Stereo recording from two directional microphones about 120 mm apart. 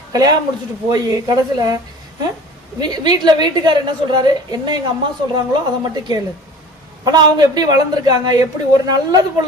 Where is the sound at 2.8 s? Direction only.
35° right (ahead or behind).